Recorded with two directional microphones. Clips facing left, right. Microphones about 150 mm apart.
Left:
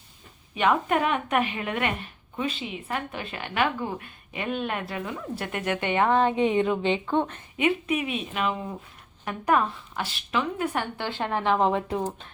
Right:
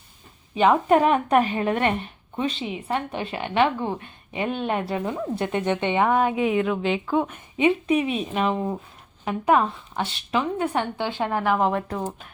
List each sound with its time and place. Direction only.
0.5 s a woman's voice: 30° right (ahead or behind); by 7.4 s 10° right (ahead or behind)
7.6 s a woman's voice: 35° right (ahead or behind)
9.2 s a woman's voice: 25° right (ahead or behind)
10.9 s speech: 15° right (ahead or behind); by 12.1 s 5° left (ahead or behind)